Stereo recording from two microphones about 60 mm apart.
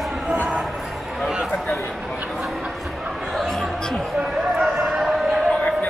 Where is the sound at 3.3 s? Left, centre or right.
Centre.